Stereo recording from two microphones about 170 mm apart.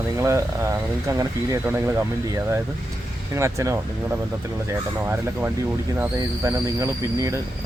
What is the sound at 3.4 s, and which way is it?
Speech, 15° right (ahead or behind).